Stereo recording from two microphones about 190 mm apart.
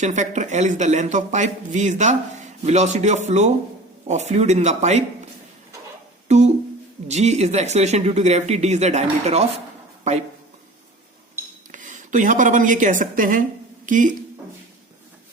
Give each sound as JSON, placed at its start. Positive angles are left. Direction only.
{"t": 0.0, "sound": "speech", "side_deg": -40}
{"t": 6.2, "sound": "speech", "side_deg": -35}
{"t": 11.4, "sound": "cutlery", "side_deg": -15}
{"t": 11.7, "sound": "speech", "side_deg": -40}